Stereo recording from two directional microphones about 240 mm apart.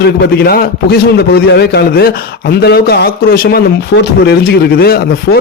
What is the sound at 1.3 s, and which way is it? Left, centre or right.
A man's voice, left.